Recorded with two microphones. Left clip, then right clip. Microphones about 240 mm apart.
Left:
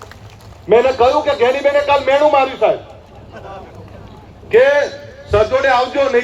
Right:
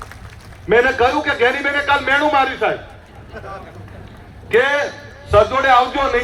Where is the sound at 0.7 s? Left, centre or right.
Right.